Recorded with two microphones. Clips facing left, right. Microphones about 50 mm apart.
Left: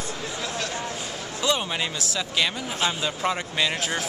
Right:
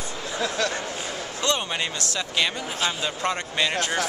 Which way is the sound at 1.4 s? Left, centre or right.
Centre.